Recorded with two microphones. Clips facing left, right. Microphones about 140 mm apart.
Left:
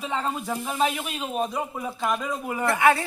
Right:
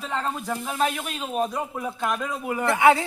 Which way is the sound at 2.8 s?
20° right (ahead or behind).